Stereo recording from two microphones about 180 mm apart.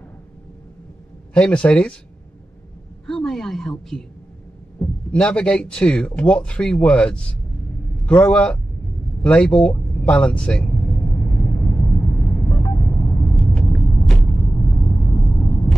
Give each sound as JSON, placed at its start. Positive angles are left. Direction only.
{"t": 1.3, "sound": "speech", "side_deg": 5}
{"t": 3.1, "sound": "speech", "side_deg": 0}
{"t": 5.1, "sound": "a man's voice", "side_deg": 5}
{"t": 9.8, "sound": "vehicle", "side_deg": 5}
{"t": 14.3, "sound": "vehicle", "side_deg": 15}